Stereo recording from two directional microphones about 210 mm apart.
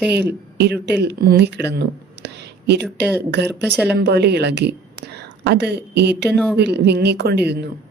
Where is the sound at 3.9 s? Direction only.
50° right (ahead or behind).